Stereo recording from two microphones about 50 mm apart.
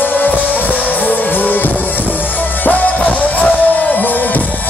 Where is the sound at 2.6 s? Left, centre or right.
Left.